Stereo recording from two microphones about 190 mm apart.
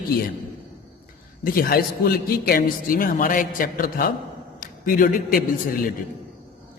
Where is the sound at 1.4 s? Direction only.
50° left (ahead or behind).